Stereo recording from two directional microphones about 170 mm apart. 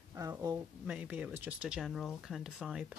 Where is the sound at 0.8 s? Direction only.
5° right (ahead or behind).